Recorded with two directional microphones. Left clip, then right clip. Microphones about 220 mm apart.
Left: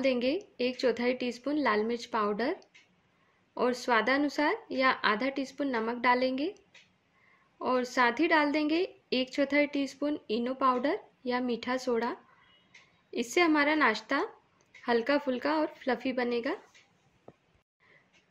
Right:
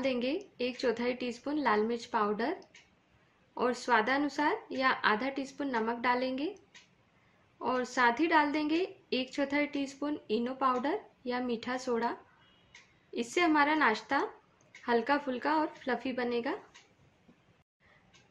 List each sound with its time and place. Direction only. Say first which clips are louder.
0.0 s a woman's voice: left 4 dB; 40° left (ahead or behind)
3.5 s a woman's voice: left 1 dB; 40° left (ahead or behind)
7.5 s a woman's voice: left 3 dB; 40° left (ahead or behind)